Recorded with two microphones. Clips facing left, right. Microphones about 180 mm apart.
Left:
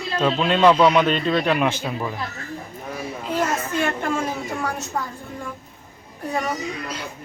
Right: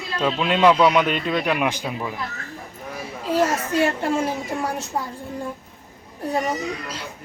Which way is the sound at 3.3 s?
35° right (ahead or behind).